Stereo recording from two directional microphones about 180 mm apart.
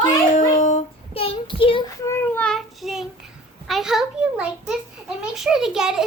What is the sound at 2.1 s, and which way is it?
Child singing, 10° left (ahead or behind).